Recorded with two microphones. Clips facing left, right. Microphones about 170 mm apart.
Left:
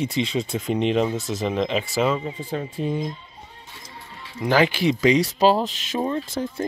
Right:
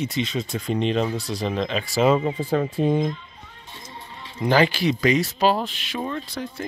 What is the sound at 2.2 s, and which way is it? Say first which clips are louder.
Speech: right 6 dB; 65° right (ahead or behind).